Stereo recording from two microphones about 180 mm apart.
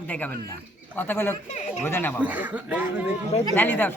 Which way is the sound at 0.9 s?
10° left (ahead or behind).